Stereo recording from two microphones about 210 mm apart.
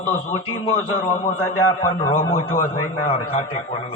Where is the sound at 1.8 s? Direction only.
20° left (ahead or behind).